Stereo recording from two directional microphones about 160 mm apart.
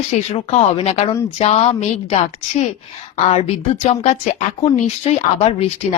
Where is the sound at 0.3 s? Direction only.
40° left (ahead or behind).